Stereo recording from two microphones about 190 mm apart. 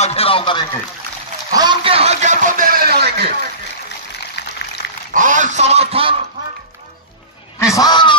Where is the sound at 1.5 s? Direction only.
25° right (ahead or behind); by 3.3 s 60° right (ahead or behind).